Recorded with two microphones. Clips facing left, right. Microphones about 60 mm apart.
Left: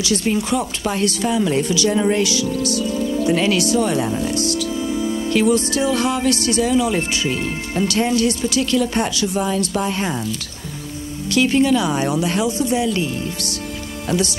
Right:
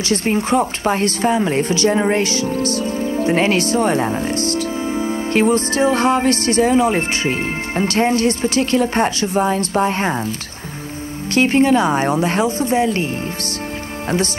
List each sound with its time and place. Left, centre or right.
0.0 s a woman's voice: right
11.3 s a woman's voice: right